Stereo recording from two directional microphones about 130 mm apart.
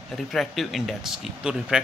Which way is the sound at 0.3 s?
Centre (ahead or behind).